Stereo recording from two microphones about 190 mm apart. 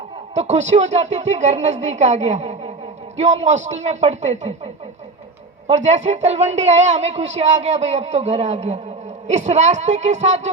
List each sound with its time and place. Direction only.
0.3 s a man's voice: 35° right (ahead or behind)